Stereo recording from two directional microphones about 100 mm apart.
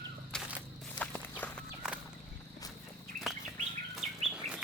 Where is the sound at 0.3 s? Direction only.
5° left (ahead or behind).